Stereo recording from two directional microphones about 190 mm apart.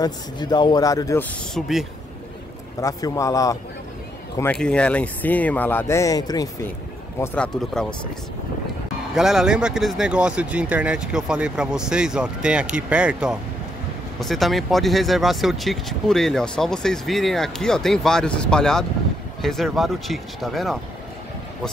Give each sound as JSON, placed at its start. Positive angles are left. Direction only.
{"t": 0.0, "sound": "a man's voice", "side_deg": 20}
{"t": 1.5, "sound": "speech", "side_deg": 0}
{"t": 2.8, "sound": "speech", "side_deg": 15}
{"t": 4.4, "sound": "speech", "side_deg": 5}
{"t": 7.2, "sound": "speech", "side_deg": 5}
{"t": 9.1, "sound": "speech", "side_deg": 0}